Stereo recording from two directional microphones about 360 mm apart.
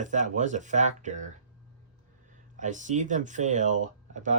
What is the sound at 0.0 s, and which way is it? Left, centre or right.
Speech, centre.